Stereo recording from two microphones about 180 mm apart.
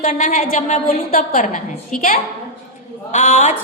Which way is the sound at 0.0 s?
45° left (ahead or behind).